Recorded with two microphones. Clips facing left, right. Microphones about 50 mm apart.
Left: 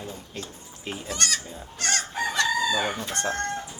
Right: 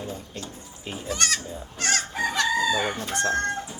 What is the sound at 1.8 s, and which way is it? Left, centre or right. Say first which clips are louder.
Chicken: right 2 dB; centre.